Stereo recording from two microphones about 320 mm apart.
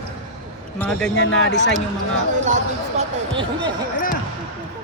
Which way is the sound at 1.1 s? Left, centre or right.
Left.